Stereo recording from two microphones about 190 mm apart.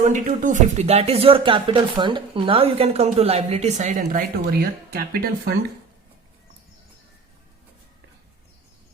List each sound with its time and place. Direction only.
0.1 s speech: 40° right (ahead or behind)
4.6 s speech: 50° right (ahead or behind)